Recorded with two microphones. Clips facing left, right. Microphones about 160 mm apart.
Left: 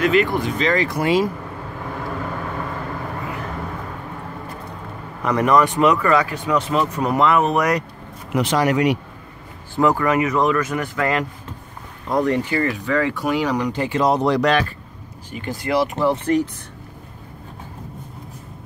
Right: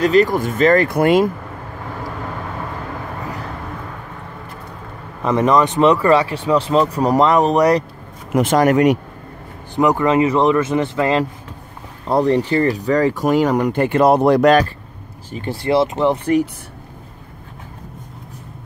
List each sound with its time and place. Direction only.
0.0 s speech: 40° right (ahead or behind); by 1.3 s 55° right (ahead or behind)
5.2 s speech: 25° right (ahead or behind)
8.3 s speech: 50° right (ahead or behind)
9.8 s speech: 20° right (ahead or behind); by 14.7 s 45° right (ahead or behind)
15.3 s speech: 30° right (ahead or behind)